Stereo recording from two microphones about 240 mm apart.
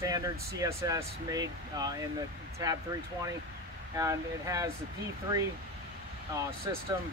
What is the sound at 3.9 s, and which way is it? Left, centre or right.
Speech, centre.